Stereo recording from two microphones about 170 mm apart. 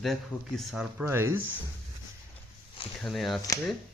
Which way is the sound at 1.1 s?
15° right (ahead or behind).